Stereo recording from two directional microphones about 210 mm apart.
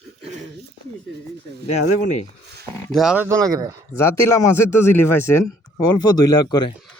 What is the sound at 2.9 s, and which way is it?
Speech, centre (ahead or behind).